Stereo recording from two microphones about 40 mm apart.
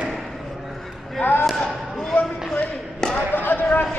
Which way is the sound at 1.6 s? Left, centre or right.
Centre.